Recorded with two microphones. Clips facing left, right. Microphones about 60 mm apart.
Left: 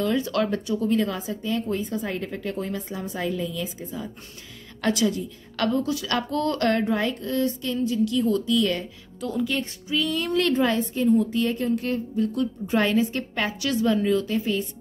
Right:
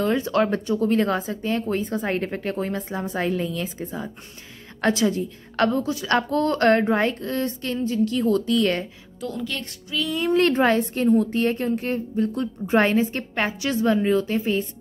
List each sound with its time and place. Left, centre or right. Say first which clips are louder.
0.0 s a woman's voice: right 3 dB; right
9.2 s a woman's voice: left 3 dB; centre
10.5 s a woman's voice: right 3 dB; right
10.8 s a woman's voice: right 1 dB; right